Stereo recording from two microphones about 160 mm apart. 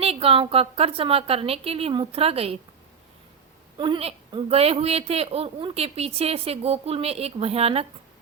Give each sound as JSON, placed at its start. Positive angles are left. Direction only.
{"t": 0.0, "sound": "a woman's voice", "side_deg": -35}
{"t": 3.8, "sound": "a woman's voice", "side_deg": -30}